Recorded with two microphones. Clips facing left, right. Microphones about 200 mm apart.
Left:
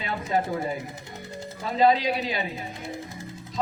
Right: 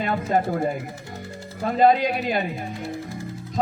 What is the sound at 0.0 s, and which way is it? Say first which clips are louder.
A man's voice: right 4 dB; 50° right (ahead or behind).